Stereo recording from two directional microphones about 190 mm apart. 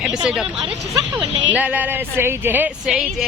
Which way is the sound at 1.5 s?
10° right (ahead or behind).